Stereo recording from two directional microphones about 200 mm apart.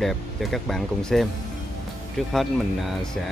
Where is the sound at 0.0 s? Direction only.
Centre (ahead or behind).